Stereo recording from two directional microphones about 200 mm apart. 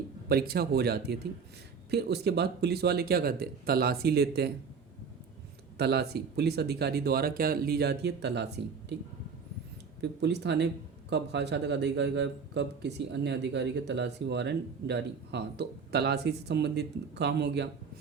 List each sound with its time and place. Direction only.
0.3 s speech: 50° right (ahead or behind)
5.7 s speech: 55° right (ahead or behind)
10.0 s a man's voice: 60° right (ahead or behind)